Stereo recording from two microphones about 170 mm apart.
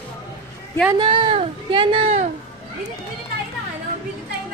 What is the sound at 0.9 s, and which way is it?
A woman's voice, 30° right (ahead or behind).